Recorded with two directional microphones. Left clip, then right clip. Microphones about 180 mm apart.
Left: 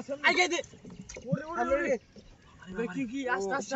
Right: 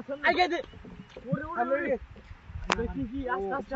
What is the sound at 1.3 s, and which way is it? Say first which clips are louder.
Speech: right 1 dB; 20° left (ahead or behind).